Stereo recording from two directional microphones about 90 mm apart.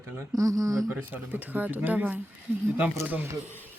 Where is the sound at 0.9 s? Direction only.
20° right (ahead or behind).